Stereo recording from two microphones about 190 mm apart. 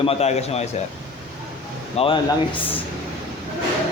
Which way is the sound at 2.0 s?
30° left (ahead or behind).